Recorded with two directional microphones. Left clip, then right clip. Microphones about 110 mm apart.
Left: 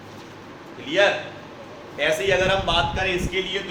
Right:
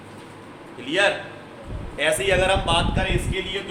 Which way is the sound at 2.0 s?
90° right.